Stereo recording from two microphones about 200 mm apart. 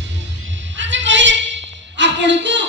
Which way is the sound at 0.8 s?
65° right (ahead or behind).